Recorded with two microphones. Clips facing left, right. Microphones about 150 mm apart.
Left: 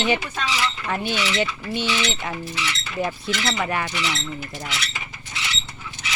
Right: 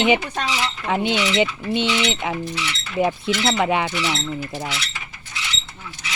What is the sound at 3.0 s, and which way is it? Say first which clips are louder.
Speech: right 5 dB; 20° right (ahead or behind).